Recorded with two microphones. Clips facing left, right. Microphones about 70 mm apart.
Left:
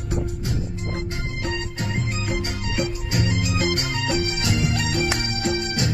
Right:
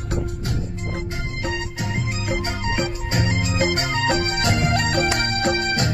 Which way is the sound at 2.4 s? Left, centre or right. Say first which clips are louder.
Right 2 dB; right.